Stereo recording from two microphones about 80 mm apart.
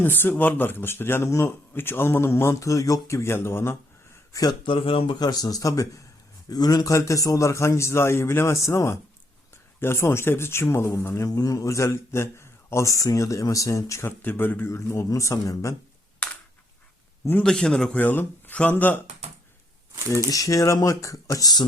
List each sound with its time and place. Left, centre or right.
0.0 s speech: left
4.3 s speech: left
4.6 s speech: left
5.2 s a man's voice: left
11.3 s a man's voice: left
14.2 s a man's voice: left
16.2 s a sound: centre
17.4 s a man's voice: centre
18.0 s speech: left
20.1 s speech: left